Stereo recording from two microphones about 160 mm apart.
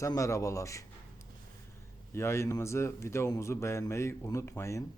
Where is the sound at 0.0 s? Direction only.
20° left (ahead or behind).